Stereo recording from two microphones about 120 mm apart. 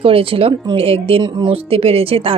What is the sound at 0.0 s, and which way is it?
Speech, 50° right (ahead or behind).